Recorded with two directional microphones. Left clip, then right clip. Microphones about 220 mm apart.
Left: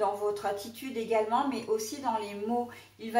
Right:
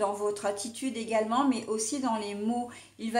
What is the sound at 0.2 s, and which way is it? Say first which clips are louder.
A woman's voice: right 1 dB; 45° right (ahead or behind).